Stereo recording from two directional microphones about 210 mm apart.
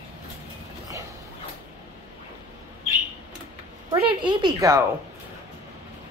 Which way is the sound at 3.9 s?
20° right (ahead or behind).